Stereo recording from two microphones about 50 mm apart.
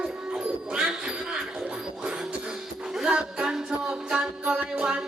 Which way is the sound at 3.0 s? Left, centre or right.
Centre.